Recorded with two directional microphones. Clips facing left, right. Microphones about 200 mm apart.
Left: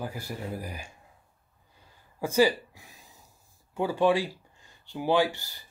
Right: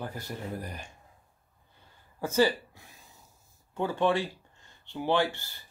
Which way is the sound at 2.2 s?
10° left (ahead or behind).